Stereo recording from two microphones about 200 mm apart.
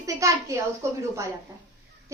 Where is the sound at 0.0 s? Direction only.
15° right (ahead or behind).